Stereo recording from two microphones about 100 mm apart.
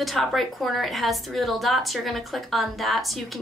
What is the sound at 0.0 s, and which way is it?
A woman's voice, centre (ahead or behind).